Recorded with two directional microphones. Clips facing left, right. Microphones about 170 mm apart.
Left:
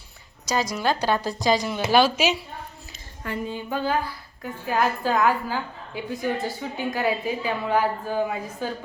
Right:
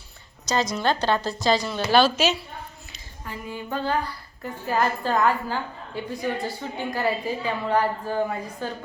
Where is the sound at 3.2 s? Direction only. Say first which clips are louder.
Left 6 dB; 80° left.